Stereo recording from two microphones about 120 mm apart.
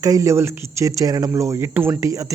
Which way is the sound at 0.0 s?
30° right (ahead or behind).